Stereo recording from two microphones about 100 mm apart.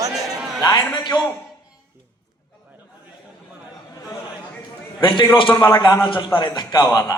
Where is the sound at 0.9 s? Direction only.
45° left (ahead or behind).